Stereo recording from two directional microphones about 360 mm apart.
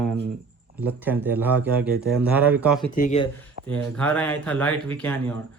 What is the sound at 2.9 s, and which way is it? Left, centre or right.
Speech, centre.